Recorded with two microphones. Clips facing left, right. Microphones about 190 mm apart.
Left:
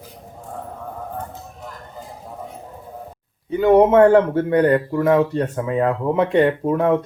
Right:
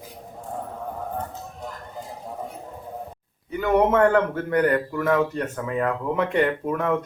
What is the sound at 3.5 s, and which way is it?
Speech, 30° left (ahead or behind).